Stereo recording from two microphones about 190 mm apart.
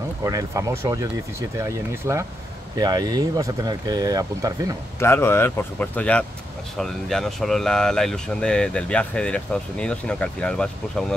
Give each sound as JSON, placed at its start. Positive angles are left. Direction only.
{"t": 0.2, "sound": "speech", "side_deg": -15}
{"t": 5.0, "sound": "speech", "side_deg": 10}